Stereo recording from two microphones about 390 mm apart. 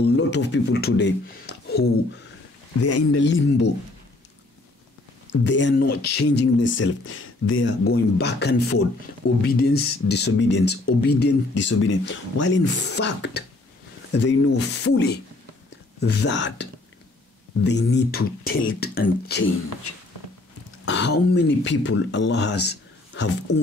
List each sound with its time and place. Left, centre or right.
0.0 s speech: left
2.8 s speech: left
5.3 s speech: left
17.6 s speech: left